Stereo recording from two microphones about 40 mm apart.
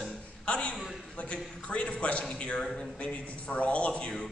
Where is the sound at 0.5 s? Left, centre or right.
Left.